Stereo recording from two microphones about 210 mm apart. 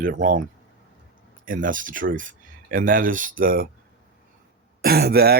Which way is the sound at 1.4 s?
40° right (ahead or behind).